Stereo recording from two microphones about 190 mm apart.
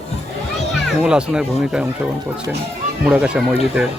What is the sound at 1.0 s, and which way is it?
Speech, 5° right (ahead or behind).